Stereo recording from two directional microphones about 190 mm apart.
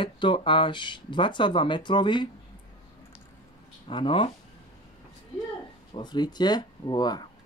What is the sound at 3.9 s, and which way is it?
Speech, 25° left (ahead or behind).